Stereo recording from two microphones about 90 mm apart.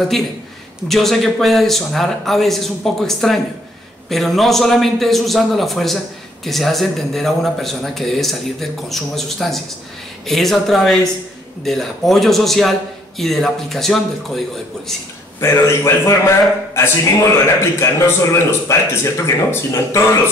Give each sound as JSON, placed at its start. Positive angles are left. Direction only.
{"t": 0.8, "sound": "speech", "side_deg": 0}
{"t": 15.4, "sound": "a man's voice", "side_deg": 30}